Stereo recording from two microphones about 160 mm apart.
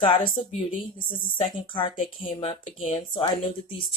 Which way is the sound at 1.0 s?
60° left (ahead or behind).